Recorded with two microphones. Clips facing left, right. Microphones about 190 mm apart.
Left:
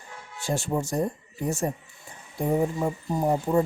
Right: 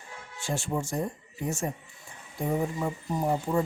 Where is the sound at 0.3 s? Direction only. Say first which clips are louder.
Left 4 dB; 40° left (ahead or behind).